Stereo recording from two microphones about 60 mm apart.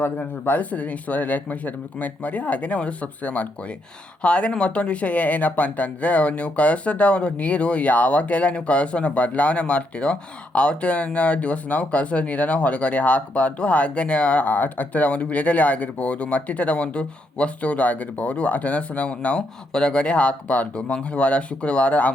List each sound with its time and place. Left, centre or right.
0.2 s speech: left